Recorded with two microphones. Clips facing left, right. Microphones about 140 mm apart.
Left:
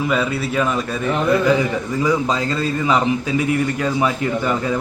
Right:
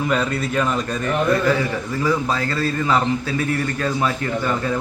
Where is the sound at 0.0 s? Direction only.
5° left (ahead or behind).